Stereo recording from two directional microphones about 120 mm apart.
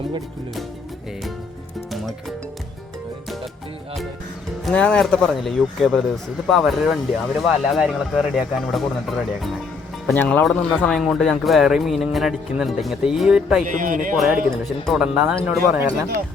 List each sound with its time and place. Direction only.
4.6 s speech: 5° left (ahead or behind)
10.2 s speech: 15° left (ahead or behind); by 13.7 s 5° right (ahead or behind)
13.7 s speech: 90° right
14.8 s speech: 5° right (ahead or behind)